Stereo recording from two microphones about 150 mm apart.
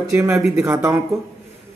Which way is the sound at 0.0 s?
20° right (ahead or behind).